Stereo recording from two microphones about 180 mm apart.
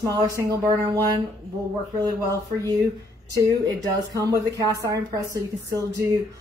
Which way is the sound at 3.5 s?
20° right (ahead or behind).